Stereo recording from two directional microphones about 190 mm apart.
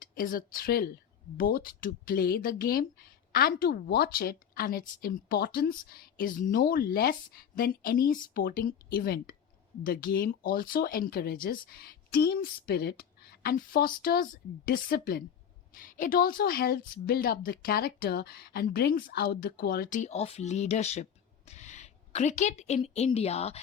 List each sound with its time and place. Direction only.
0.0 s a woman's voice: 45° left (ahead or behind)
15.7 s speech: 45° left (ahead or behind)